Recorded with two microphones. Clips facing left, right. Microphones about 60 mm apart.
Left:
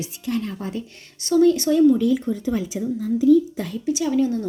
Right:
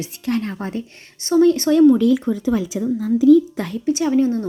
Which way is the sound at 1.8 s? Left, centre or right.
Right.